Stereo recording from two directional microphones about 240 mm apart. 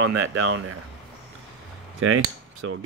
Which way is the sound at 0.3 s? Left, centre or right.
Right.